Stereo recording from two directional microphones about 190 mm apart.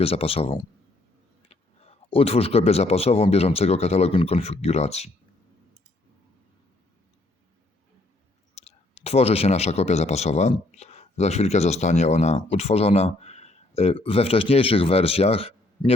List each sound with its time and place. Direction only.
0.0 s speech: 30° left (ahead or behind)
8.5 s speech: 35° left (ahead or behind)